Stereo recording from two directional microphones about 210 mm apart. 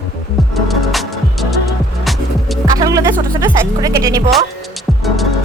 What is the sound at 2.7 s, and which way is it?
Speech, 15° right (ahead or behind).